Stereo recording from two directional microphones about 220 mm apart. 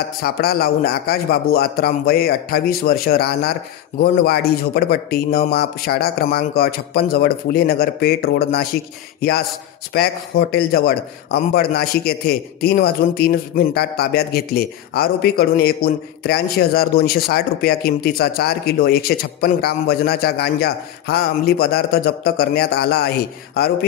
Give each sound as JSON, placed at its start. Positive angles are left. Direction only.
{"t": 0.2, "sound": "speech", "side_deg": 45}
{"t": 9.9, "sound": "speech", "side_deg": 45}